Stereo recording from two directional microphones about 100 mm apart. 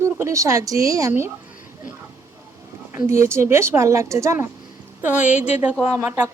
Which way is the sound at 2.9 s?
25° right (ahead or behind).